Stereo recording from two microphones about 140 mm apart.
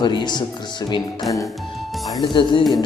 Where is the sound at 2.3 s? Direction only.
35° left (ahead or behind).